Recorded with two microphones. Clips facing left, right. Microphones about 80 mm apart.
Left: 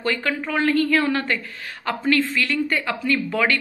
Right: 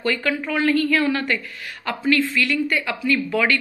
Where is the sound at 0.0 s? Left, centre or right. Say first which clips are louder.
Right 1 dB; left.